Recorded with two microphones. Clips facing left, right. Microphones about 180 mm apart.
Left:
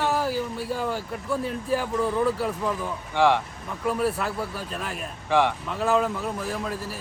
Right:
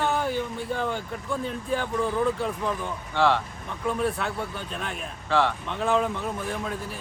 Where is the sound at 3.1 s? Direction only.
15° left (ahead or behind).